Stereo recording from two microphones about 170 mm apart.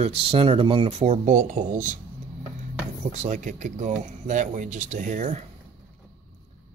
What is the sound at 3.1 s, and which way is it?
Speech, 45° right (ahead or behind).